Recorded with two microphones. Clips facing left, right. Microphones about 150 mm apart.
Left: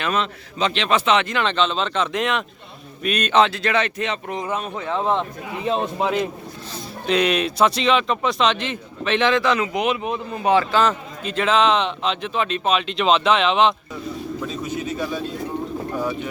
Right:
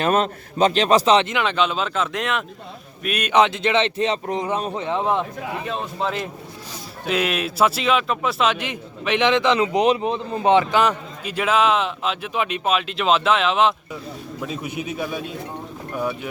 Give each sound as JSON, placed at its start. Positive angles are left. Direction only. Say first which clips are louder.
{"t": 0.0, "sound": "a man's voice", "louder": "right 4 dB", "side_deg": -45}
{"t": 1.3, "sound": "a man's voice", "louder": "even", "side_deg": -10}
{"t": 5.6, "sound": "a man's voice", "louder": "left 8 dB", "side_deg": 20}
{"t": 7.1, "sound": "speech", "louder": "left 3 dB", "side_deg": -5}
{"t": 9.7, "sound": "a man's voice", "louder": "right 4 dB", "side_deg": -35}